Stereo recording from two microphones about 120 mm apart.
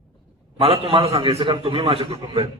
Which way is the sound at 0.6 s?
50° right (ahead or behind).